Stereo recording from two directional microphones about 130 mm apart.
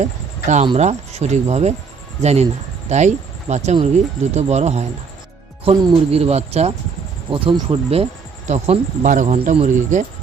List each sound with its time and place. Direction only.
0.0 s a sound: 65° right (ahead or behind)
0.8 s speech: 60° right (ahead or behind)
6.1 s speech: 50° right (ahead or behind)
7.3 s speech: 45° right (ahead or behind); by 10.1 s 70° right (ahead or behind)